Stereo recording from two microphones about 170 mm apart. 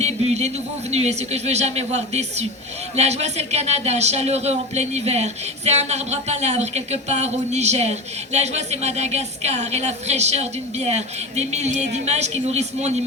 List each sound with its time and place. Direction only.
0.0 s speech: 40° right (ahead or behind)